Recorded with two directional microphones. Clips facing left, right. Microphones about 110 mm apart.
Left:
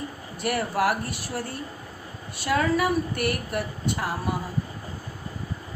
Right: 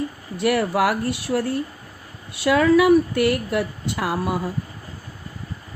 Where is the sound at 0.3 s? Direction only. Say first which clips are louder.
Right 6 dB; 90° right.